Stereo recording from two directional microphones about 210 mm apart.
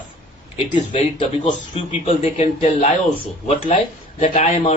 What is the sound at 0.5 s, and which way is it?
A man's voice, 25° left (ahead or behind).